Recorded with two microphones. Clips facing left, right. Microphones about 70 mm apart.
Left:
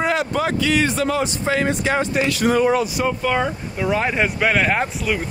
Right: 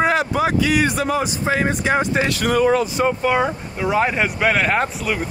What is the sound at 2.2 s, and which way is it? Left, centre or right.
Speech, right.